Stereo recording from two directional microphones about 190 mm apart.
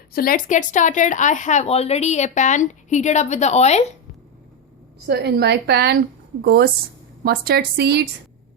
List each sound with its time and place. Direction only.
0.1 s speech: 50° left (ahead or behind)
5.0 s a woman's voice: 60° right (ahead or behind)